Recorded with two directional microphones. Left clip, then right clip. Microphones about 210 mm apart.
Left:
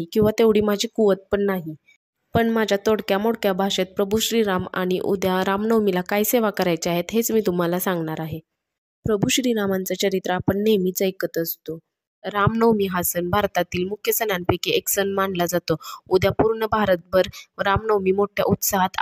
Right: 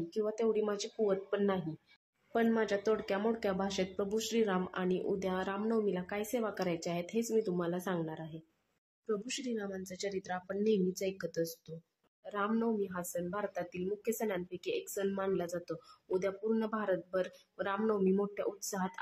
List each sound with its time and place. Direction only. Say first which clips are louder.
0.1 s speech: left 16 dB; 45° left (ahead or behind)